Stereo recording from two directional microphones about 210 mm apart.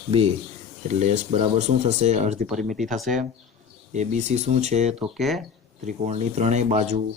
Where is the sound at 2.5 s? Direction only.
Centre (ahead or behind).